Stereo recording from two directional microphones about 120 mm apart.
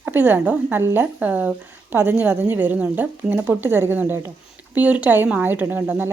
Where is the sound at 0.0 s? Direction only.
15° right (ahead or behind).